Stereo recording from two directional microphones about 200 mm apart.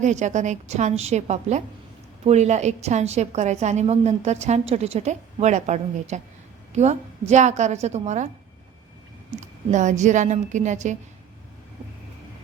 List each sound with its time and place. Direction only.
0.0 s a woman's voice: 35° right (ahead or behind)
9.4 s a woman's voice: 40° right (ahead or behind)